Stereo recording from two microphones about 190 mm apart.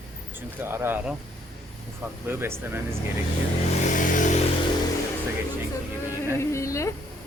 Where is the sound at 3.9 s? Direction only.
40° left (ahead or behind).